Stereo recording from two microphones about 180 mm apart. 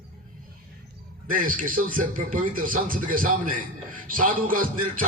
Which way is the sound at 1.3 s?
50° right (ahead or behind).